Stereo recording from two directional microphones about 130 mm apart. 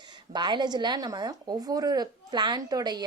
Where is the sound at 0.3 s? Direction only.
35° right (ahead or behind).